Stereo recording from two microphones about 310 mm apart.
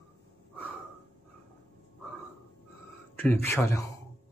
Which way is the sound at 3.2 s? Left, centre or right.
Centre.